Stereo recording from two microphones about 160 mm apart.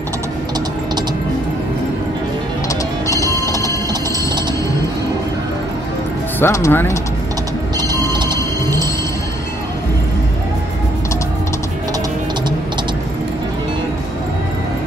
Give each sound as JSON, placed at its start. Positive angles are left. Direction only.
{"t": 3.4, "sound": "music", "side_deg": -25}
{"t": 6.4, "sound": "speech", "side_deg": 15}
{"t": 7.7, "sound": "music", "side_deg": -30}